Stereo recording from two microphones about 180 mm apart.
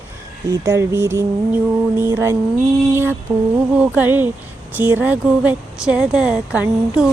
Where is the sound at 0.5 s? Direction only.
15° right (ahead or behind).